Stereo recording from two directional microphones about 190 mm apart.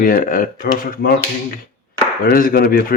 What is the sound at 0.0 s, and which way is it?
Speech, 45° left (ahead or behind).